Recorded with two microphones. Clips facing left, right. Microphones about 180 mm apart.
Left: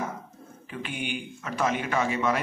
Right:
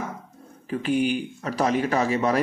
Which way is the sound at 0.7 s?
40° right (ahead or behind).